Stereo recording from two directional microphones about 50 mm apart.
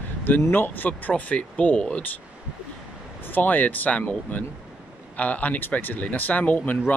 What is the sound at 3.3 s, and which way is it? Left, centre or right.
Speech, left.